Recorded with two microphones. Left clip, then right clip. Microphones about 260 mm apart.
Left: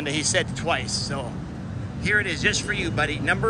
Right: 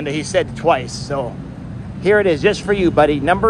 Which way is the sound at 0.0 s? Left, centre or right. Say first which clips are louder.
Right 5 dB; centre.